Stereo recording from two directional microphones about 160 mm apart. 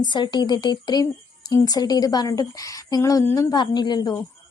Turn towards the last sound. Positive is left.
turn(degrees=25)  # may be behind; listen again after turning